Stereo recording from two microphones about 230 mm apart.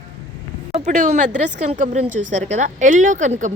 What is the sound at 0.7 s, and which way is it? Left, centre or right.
A woman's voice, right.